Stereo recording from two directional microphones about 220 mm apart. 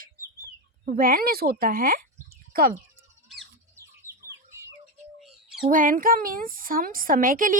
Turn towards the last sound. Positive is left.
turn(degrees=-40)  # may be behind; listen again after turning